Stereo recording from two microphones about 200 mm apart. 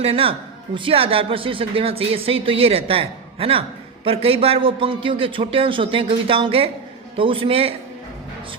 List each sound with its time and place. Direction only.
0.0 s a man's voice: 30° right (ahead or behind)